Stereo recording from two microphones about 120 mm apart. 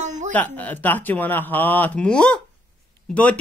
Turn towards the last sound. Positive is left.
turn(degrees=10)  # may be behind; listen again after turning